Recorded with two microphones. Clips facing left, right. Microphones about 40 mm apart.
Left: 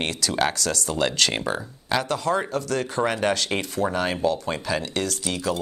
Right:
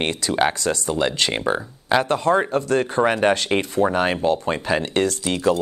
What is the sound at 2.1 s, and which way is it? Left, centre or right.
Speech, right.